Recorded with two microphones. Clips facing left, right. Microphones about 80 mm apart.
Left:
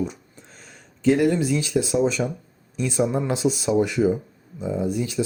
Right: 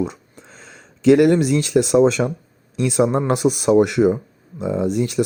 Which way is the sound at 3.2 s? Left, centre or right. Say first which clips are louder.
Right 4 dB; right.